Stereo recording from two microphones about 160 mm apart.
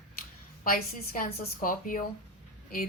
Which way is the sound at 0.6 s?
65° left (ahead or behind).